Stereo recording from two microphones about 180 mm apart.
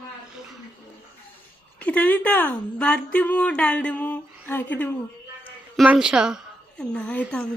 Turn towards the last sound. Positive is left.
turn(degrees=5)  # may be behind; listen again after turning